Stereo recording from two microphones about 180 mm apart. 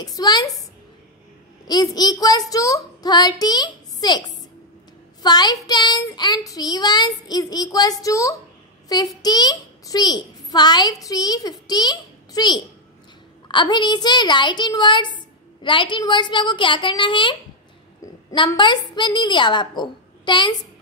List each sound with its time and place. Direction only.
0.0 s a woman's voice: 20° left (ahead or behind)
2.0 s a woman's voice: 20° left (ahead or behind)
5.2 s a woman's voice: 25° left (ahead or behind)